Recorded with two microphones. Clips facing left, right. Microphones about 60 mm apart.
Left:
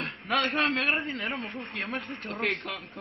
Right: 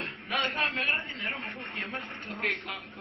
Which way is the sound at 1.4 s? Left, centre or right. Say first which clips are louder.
Left 2 dB; right.